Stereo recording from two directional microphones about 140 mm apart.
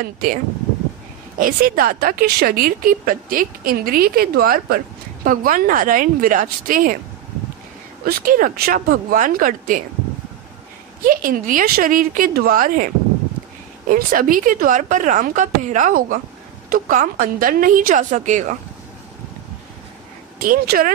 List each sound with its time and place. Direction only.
0.0 s a woman's voice: 90° right
1.4 s a woman's voice: 90° right
8.0 s speech: 90° right
11.1 s a woman's voice: 75° right (ahead or behind); by 18.6 s 60° right (ahead or behind)
20.4 s speech: 80° right